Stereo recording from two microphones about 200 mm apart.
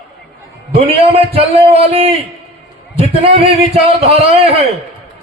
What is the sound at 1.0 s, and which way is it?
A man's voice, 30° right (ahead or behind).